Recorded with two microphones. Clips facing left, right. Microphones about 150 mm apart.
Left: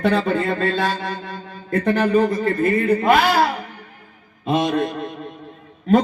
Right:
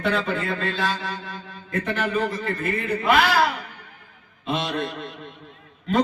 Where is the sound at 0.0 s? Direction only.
40° left (ahead or behind).